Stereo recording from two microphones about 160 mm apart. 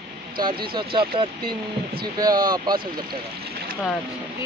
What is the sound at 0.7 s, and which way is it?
Speech, 30° right (ahead or behind).